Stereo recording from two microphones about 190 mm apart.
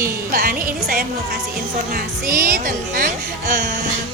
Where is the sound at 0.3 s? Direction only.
50° right (ahead or behind).